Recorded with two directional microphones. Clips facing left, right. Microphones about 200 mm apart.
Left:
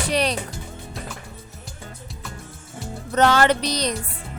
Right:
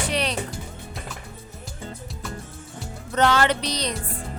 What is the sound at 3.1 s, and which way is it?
Music, 45° left (ahead or behind).